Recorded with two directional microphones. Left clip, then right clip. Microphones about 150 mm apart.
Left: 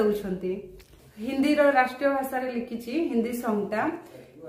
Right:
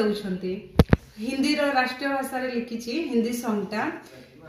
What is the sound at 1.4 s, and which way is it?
Child singing, 40° left (ahead or behind).